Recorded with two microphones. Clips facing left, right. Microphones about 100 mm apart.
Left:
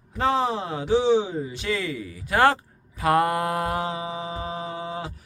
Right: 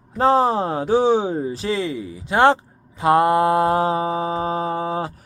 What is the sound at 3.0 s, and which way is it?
Mantra, 25° right (ahead or behind).